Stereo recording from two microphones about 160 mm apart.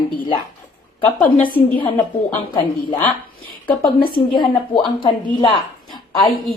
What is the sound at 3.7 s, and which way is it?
Speech, 25° left (ahead or behind).